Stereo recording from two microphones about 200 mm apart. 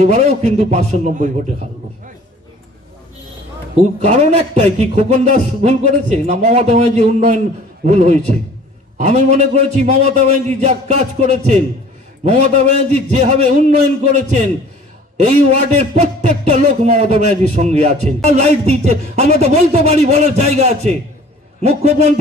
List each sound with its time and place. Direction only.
0.0 s a man's voice: 30° right (ahead or behind)
3.7 s a man's voice: 35° right (ahead or behind)